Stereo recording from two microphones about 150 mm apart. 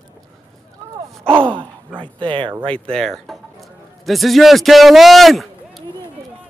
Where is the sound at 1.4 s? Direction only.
35° right (ahead or behind).